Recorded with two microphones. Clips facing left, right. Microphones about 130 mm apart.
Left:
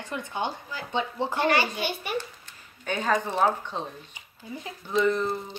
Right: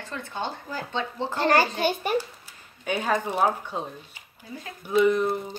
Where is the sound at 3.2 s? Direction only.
10° right (ahead or behind).